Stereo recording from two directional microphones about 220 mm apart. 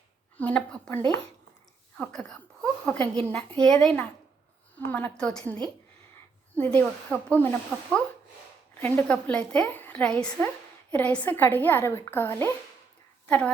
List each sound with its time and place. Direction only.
0.3 s a woman's voice: 5° left (ahead or behind)